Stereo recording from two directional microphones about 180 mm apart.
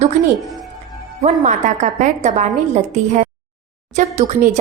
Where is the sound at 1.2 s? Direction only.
40° right (ahead or behind).